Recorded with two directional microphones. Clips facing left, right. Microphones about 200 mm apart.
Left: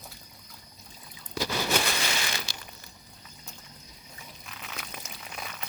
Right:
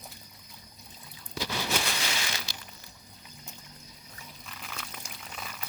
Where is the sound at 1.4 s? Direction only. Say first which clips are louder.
Left 4 dB; 55° left (ahead or behind).